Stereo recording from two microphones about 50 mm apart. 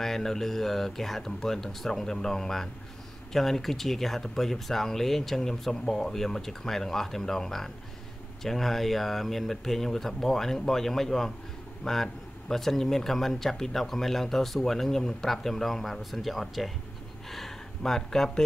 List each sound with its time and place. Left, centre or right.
0.0 s speech: centre